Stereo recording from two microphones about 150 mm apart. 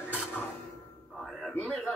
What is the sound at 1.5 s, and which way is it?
Speech, 5° left (ahead or behind).